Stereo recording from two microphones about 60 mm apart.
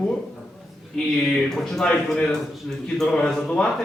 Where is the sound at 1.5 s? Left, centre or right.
Centre.